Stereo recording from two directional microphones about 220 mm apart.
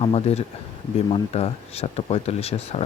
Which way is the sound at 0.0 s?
30° left (ahead or behind).